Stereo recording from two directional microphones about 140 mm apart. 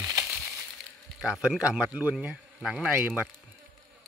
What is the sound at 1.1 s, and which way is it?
Speech, 5° right (ahead or behind).